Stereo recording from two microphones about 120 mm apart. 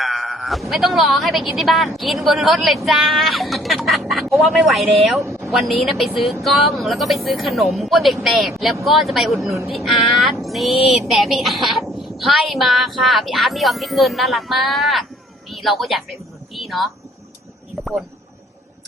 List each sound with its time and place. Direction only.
0.0 s speech: centre (ahead or behind)
5.2 s a sound: 25° right (ahead or behind)
5.5 s speech: centre (ahead or behind)